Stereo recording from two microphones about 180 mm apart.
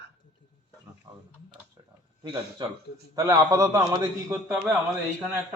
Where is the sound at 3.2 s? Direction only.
15° right (ahead or behind).